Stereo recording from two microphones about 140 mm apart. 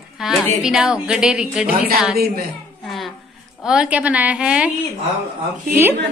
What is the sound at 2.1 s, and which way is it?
Speech, 90° right.